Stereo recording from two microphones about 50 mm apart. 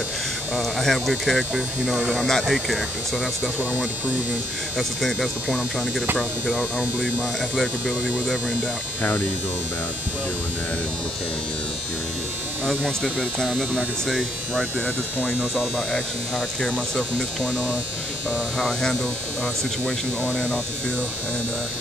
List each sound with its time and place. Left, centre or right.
0.6 s speech: centre
4.7 s speech: centre
12.8 s speech: centre
14.0 s speech: centre
15.9 s speech: centre
18.6 s speech: centre
19.4 s speech: left